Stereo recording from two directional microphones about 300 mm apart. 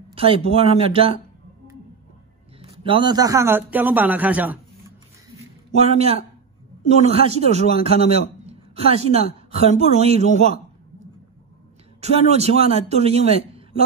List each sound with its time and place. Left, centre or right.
0.1 s speech: centre
2.6 s a man's voice: centre
5.8 s speech: right
12.0 s speech: right